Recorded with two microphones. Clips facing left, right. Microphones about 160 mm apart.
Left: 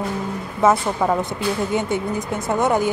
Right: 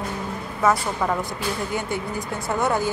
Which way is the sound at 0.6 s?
20° left (ahead or behind).